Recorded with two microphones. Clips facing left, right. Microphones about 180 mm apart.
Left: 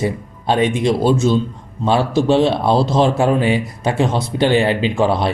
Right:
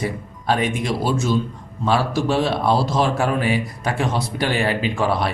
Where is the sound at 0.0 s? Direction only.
25° left (ahead or behind).